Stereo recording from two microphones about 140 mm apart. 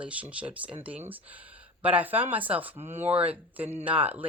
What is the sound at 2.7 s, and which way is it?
Speech, 50° right (ahead or behind).